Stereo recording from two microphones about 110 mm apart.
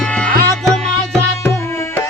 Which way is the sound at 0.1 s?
10° left (ahead or behind).